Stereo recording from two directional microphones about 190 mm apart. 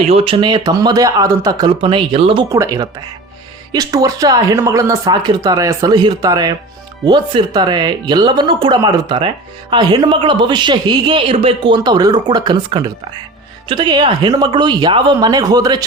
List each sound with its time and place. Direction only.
0.0 s speech: 35° right (ahead or behind)